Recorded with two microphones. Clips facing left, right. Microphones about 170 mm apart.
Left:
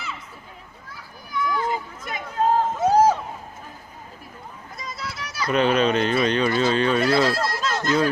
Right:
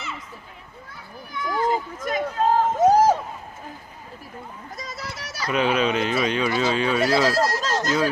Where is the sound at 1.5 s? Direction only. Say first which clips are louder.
Right 4 dB; 45° right (ahead or behind).